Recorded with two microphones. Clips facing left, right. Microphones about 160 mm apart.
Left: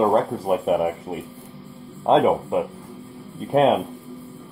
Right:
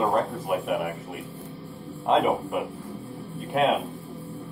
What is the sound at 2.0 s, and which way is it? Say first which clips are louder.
Speech: left 5 dB; 30° left (ahead or behind).